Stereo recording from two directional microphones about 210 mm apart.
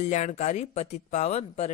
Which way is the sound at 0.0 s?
35° left (ahead or behind).